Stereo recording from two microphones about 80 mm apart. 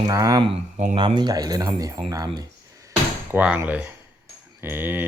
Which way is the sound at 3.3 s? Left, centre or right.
Centre.